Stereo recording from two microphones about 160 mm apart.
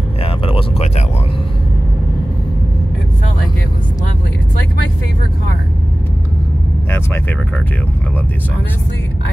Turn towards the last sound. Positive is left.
turn(degrees=10)  # may be behind; listen again after turning